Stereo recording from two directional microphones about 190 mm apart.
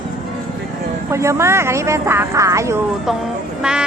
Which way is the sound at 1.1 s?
15° right (ahead or behind).